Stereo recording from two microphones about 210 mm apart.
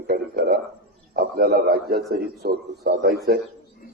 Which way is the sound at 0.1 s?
50° right (ahead or behind).